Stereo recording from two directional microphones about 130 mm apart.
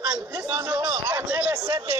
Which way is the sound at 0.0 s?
10° right (ahead or behind).